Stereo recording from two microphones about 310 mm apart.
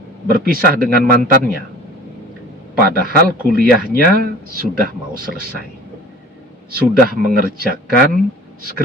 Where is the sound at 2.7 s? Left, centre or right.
Right.